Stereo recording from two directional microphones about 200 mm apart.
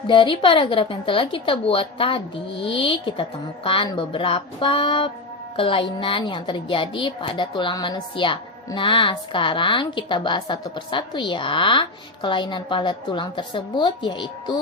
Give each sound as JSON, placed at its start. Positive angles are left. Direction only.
{"t": 0.1, "sound": "a woman's voice", "side_deg": 25}